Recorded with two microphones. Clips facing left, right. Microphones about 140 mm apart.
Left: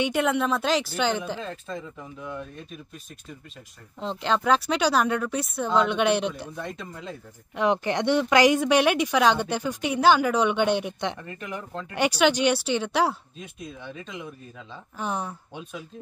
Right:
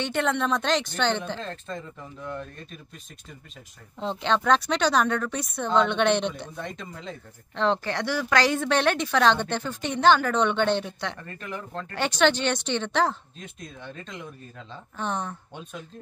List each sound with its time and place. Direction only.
0.0 s speech: 5° left (ahead or behind)
4.0 s speech: centre (ahead or behind)